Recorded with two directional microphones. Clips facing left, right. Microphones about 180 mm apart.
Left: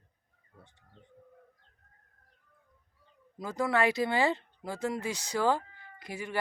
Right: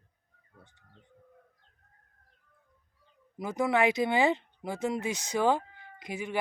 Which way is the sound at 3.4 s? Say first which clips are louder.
Right 2 dB; 20° right (ahead or behind).